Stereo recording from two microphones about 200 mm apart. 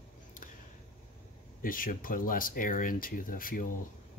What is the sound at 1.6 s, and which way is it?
Speech, 45° left (ahead or behind).